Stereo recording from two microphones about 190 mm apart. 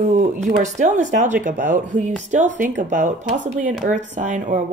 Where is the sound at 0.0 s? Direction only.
40° right (ahead or behind).